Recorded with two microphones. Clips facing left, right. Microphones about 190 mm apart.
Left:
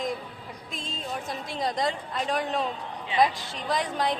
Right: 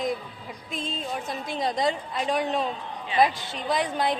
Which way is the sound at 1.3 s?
Centre (ahead or behind).